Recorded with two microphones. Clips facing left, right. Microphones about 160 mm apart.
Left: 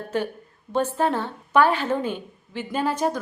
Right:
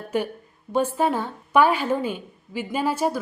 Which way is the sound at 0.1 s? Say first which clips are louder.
Right 1 dB; 10° right (ahead or behind).